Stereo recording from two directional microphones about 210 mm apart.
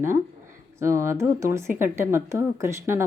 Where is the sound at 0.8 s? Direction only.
15° right (ahead or behind).